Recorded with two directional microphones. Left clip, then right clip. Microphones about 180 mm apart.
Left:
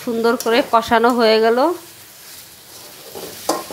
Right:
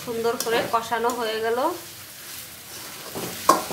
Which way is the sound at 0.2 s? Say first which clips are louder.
Left 7 dB; 45° left (ahead or behind).